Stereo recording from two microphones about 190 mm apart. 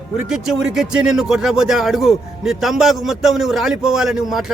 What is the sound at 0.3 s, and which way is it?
Speech, centre (ahead or behind).